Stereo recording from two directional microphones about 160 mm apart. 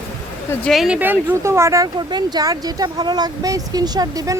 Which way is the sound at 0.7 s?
5° right (ahead or behind).